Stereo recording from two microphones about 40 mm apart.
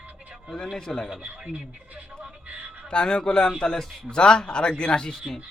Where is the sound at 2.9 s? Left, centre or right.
Left.